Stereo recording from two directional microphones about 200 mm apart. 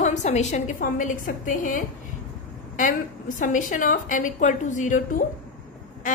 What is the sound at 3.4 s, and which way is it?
A woman's voice, 40° left (ahead or behind).